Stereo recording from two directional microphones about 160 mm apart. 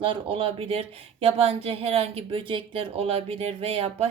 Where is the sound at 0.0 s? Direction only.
35° right (ahead or behind).